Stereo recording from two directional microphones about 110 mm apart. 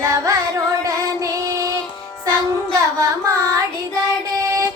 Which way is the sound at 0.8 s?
30° right (ahead or behind).